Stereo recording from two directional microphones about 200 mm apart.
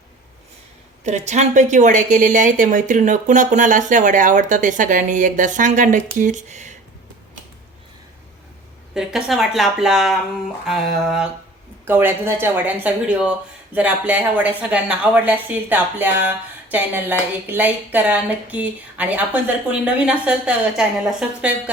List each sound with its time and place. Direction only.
1.0 s a woman's voice: 35° right (ahead or behind)
9.0 s a woman's voice: 5° right (ahead or behind)